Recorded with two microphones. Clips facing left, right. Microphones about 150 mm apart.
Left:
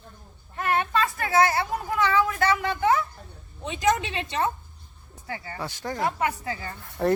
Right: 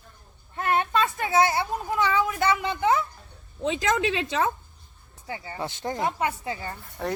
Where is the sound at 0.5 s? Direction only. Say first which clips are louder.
Right 1 dB; 25° right (ahead or behind).